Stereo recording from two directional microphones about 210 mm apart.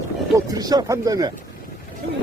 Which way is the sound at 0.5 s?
20° right (ahead or behind).